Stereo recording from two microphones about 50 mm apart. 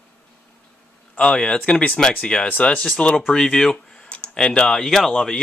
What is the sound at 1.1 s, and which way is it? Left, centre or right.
Speech, centre.